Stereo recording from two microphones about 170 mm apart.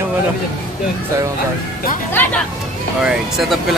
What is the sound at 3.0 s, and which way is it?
Speech, centre (ahead or behind).